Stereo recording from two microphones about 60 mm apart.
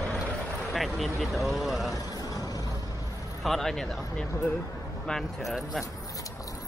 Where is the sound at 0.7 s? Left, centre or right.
Centre.